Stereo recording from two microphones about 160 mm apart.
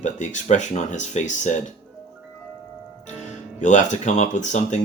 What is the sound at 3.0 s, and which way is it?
Speech, 50° left (ahead or behind).